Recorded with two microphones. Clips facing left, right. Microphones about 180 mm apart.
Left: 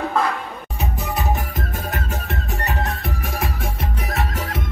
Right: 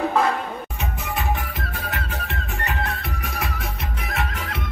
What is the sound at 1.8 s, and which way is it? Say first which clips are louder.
Music: left 1 dB; 45° left (ahead or behind).